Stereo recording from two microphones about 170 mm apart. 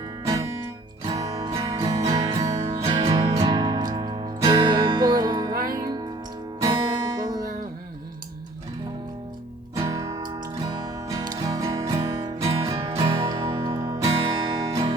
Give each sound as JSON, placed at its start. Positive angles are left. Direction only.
{"t": 1.0, "sound": "music", "side_deg": -20}
{"t": 9.7, "sound": "music", "side_deg": -20}